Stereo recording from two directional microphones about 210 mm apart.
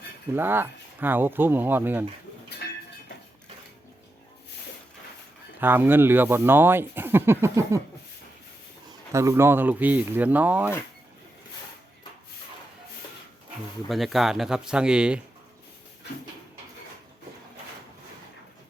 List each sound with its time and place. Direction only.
0.3 s speech: 10° right (ahead or behind)
2.6 s a sound: 55° left (ahead or behind)
5.5 s speech: 10° right (ahead or behind)
8.9 s speech: 15° right (ahead or behind)
13.8 s speech: centre (ahead or behind)